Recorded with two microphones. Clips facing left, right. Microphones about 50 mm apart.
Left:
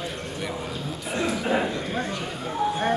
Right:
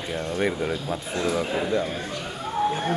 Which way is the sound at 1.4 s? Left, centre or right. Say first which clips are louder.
Even; left.